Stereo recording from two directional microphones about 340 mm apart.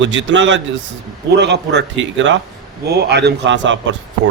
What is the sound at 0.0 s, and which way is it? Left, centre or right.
A man's voice, right.